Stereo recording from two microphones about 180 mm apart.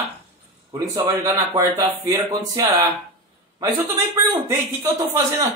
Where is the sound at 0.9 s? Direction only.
15° right (ahead or behind).